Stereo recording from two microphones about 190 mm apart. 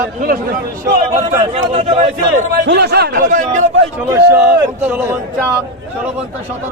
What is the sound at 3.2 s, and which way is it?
Speech, 40° right (ahead or behind).